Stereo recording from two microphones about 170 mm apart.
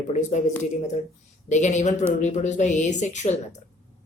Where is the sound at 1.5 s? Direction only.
45° left (ahead or behind).